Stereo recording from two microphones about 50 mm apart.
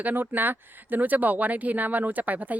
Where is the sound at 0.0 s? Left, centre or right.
Right.